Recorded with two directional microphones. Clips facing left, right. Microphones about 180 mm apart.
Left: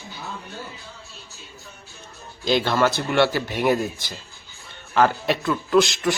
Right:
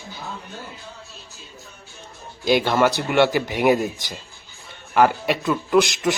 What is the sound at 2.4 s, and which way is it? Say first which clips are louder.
A man's voice: right 2 dB; 15° right (ahead or behind).